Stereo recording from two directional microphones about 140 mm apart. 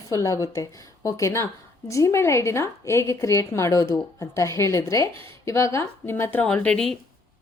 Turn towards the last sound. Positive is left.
turn(degrees=5)  # may be behind; listen again after turning